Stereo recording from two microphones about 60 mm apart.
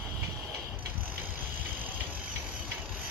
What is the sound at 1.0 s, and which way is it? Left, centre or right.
Vehicle, right.